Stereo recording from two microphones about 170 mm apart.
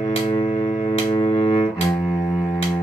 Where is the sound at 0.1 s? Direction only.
35° left (ahead or behind).